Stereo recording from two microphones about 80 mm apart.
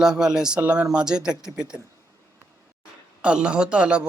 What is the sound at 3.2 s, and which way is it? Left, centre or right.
Speech, centre.